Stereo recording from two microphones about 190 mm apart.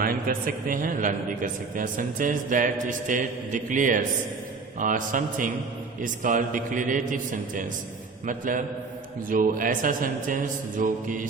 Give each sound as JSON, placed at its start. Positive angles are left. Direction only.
{"t": 0.0, "sound": "a man's voice", "side_deg": -50}